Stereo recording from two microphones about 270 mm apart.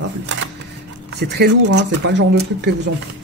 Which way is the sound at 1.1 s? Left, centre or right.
Right.